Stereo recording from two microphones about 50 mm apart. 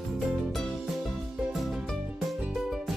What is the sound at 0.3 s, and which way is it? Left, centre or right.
Music, centre.